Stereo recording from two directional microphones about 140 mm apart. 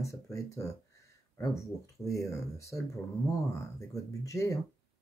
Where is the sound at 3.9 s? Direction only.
25° left (ahead or behind).